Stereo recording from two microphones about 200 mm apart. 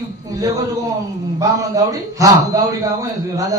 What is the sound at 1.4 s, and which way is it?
Speech, 15° right (ahead or behind).